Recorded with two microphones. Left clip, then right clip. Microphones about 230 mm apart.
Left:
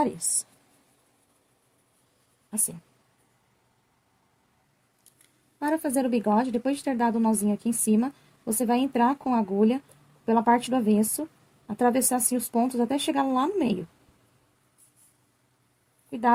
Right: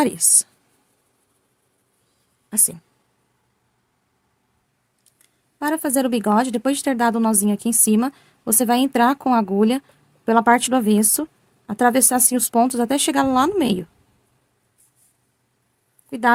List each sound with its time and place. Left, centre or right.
5.5 s speech: right
16.0 s speech: right